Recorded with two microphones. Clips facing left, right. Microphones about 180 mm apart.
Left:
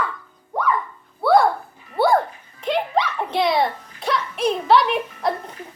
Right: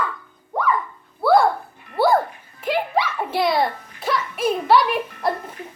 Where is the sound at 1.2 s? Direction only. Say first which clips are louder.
Even; centre (ahead or behind).